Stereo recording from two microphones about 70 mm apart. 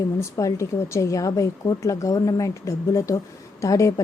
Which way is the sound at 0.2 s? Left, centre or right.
Left.